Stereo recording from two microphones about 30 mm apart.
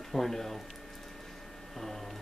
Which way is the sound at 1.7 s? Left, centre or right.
Centre.